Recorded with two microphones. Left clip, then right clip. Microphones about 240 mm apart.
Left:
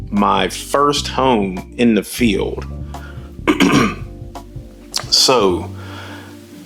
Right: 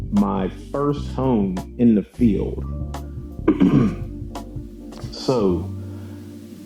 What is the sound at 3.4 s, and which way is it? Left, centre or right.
Throat clearing, centre.